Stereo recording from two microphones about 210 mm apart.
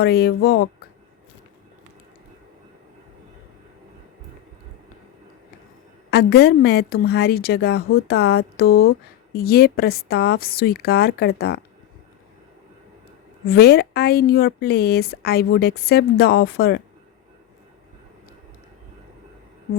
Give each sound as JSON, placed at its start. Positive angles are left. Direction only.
{"t": 0.0, "sound": "a woman's voice", "side_deg": 50}
{"t": 6.1, "sound": "a woman's voice", "side_deg": 50}
{"t": 13.4, "sound": "a woman's voice", "side_deg": 45}